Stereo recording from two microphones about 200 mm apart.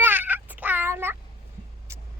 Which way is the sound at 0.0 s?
10° right (ahead or behind).